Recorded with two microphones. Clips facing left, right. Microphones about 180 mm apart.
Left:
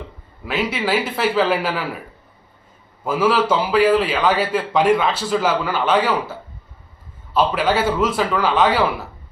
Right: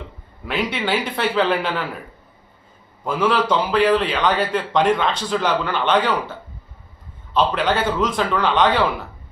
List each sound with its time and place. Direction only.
0.4 s a man's voice: centre (ahead or behind)
3.0 s a man's voice: 5° left (ahead or behind)
7.3 s a man's voice: 5° left (ahead or behind)